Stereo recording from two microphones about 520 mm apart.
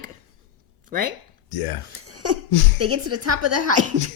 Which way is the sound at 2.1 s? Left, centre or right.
Right.